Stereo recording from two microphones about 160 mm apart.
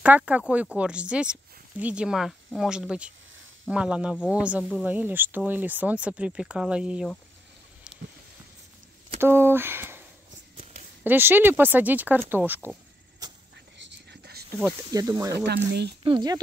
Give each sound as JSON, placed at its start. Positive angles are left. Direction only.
{"t": 0.0, "sound": "speech", "side_deg": -10}
{"t": 9.2, "sound": "speech", "side_deg": -15}
{"t": 11.1, "sound": "speech", "side_deg": -15}
{"t": 13.7, "sound": "whispering", "side_deg": -90}
{"t": 14.9, "sound": "speech", "side_deg": -25}
{"t": 15.3, "sound": "speech", "side_deg": -90}
{"t": 16.0, "sound": "speech", "side_deg": -30}